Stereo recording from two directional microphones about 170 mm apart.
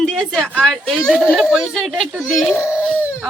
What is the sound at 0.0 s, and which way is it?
Speech, centre (ahead or behind).